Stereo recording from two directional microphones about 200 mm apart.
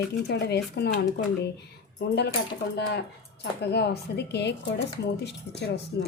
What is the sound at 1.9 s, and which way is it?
Speech, 55° left (ahead or behind).